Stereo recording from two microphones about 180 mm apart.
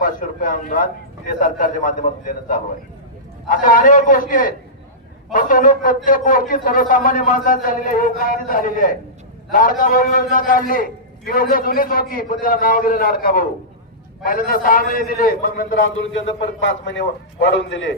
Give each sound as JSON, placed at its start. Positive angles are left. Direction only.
{"t": 0.0, "sound": "a man's voice", "side_deg": 50}
{"t": 15.7, "sound": "speech", "side_deg": 90}